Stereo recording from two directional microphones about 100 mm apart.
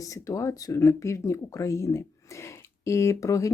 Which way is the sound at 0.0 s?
35° left (ahead or behind).